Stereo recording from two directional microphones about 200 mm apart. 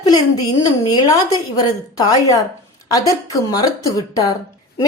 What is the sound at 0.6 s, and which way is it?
A woman's voice, 20° left (ahead or behind).